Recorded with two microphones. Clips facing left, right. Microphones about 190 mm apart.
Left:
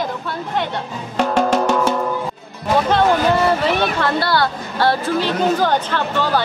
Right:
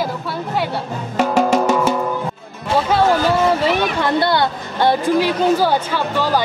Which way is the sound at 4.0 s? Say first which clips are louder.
Right 2 dB; 20° right (ahead or behind).